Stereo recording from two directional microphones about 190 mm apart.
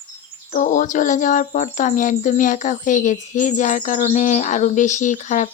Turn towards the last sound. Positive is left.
turn(degrees=40)  # may be behind; listen again after turning